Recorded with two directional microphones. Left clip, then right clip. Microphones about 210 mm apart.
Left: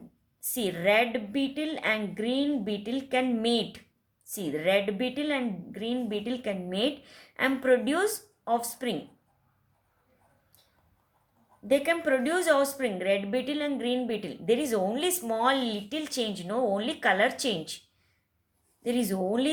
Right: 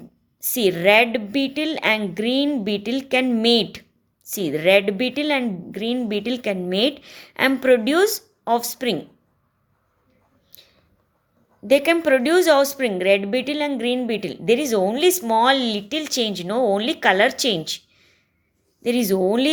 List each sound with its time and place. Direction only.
0.3 s a woman's voice: 40° right (ahead or behind)
11.7 s a woman's voice: 40° right (ahead or behind)
18.8 s a woman's voice: 35° right (ahead or behind)